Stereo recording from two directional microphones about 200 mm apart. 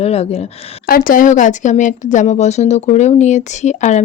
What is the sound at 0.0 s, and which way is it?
Speech, 30° left (ahead or behind).